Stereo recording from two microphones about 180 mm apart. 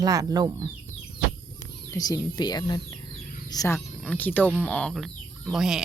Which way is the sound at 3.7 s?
5° left (ahead or behind).